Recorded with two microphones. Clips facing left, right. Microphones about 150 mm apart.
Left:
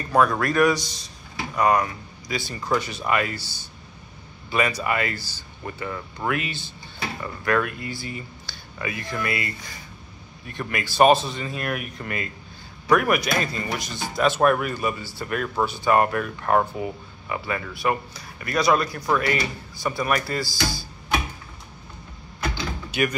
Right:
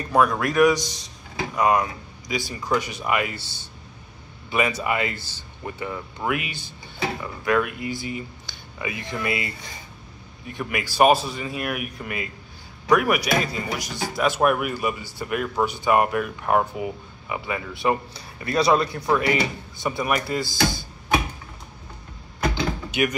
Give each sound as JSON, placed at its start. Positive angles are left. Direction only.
{"t": 0.1, "sound": "speech", "side_deg": -15}
{"t": 22.8, "sound": "speech", "side_deg": -20}